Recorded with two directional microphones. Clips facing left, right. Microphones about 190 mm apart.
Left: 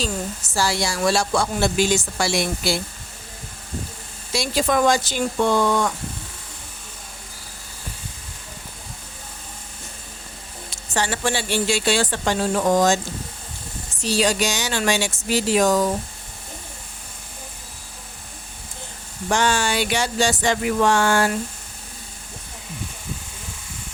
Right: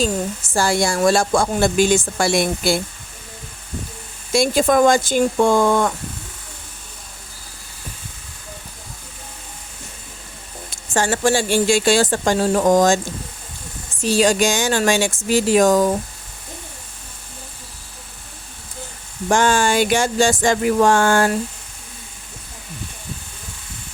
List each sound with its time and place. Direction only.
0.0 s a woman's voice: 50° right (ahead or behind)
4.3 s a woman's voice: 50° right (ahead or behind)
10.9 s a woman's voice: 45° right (ahead or behind)
14.0 s a woman's voice: 50° right (ahead or behind)
19.3 s a woman's voice: 50° right (ahead or behind)